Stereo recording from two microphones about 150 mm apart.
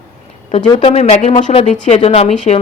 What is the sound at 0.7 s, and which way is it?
A woman's voice, 45° left (ahead or behind).